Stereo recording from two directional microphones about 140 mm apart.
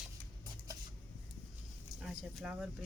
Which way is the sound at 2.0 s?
5° right (ahead or behind).